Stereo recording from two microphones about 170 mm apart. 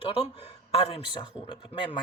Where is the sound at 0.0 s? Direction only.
35° left (ahead or behind).